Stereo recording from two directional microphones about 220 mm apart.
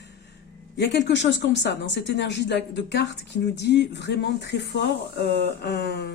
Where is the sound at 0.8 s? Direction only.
50° left (ahead or behind).